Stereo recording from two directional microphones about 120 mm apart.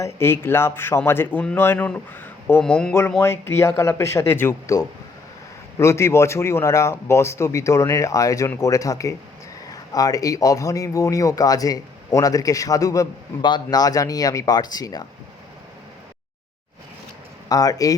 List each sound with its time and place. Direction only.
0.0 s speech: 20° left (ahead or behind)
2.5 s speech: 10° left (ahead or behind)
3.2 s speech: 20° left (ahead or behind)
17.5 s speech: 30° left (ahead or behind)